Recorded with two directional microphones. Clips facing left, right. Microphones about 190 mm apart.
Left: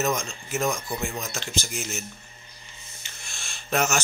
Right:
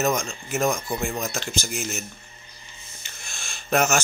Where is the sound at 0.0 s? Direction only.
50° right (ahead or behind).